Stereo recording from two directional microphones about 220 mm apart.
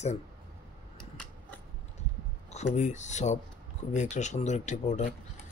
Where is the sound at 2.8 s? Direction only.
35° left (ahead or behind).